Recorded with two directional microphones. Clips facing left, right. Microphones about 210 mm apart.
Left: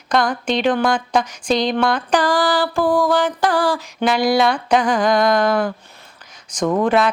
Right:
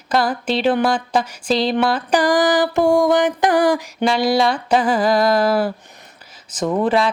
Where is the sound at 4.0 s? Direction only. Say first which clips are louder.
Left 1 dB; centre (ahead or behind).